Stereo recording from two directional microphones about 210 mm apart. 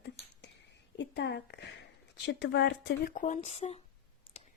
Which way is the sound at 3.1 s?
35° left (ahead or behind).